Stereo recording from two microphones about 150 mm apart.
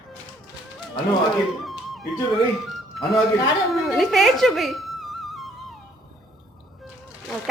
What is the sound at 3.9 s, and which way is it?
Music, centre (ahead or behind).